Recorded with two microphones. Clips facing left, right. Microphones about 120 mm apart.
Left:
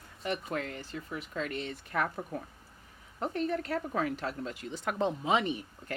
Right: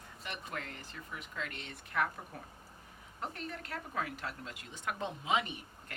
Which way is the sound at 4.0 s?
30° left (ahead or behind).